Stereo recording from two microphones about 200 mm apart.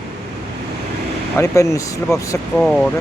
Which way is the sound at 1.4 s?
15° left (ahead or behind).